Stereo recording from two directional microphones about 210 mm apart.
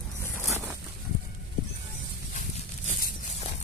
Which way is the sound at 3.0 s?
30° left (ahead or behind).